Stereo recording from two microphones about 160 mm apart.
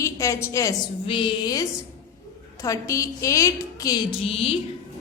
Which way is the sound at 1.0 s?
35° left (ahead or behind).